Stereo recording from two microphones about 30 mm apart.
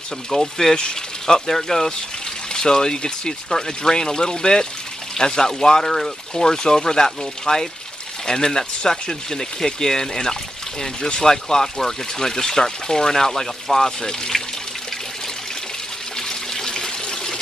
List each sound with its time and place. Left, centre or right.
0.3 s speech: centre
16.2 s water: left